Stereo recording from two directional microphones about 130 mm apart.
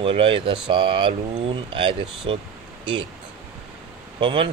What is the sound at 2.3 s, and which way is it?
Speech, 40° right (ahead or behind).